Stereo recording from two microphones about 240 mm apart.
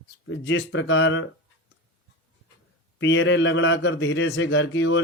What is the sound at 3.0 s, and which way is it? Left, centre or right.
Speech, left.